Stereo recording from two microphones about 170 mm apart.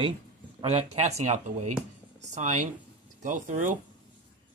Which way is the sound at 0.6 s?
35° right (ahead or behind).